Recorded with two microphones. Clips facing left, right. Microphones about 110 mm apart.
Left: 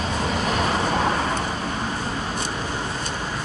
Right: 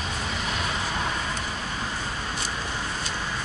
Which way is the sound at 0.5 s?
60° left (ahead or behind).